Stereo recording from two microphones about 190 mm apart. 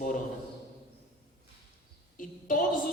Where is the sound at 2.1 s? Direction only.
45° left (ahead or behind).